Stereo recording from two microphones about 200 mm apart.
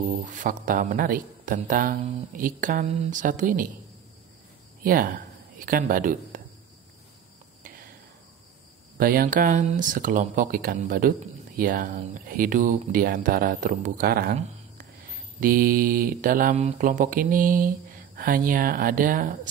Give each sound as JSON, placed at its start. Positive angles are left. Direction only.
{"t": 0.2, "sound": "speech", "side_deg": -40}
{"t": 4.8, "sound": "speech", "side_deg": -45}
{"t": 7.6, "sound": "cricket", "side_deg": -45}
{"t": 8.9, "sound": "speech", "side_deg": -45}